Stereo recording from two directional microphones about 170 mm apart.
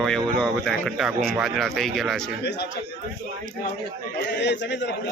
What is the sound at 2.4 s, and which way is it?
Speech, 85° left.